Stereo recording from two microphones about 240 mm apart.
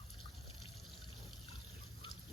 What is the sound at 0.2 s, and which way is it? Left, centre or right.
Water, right.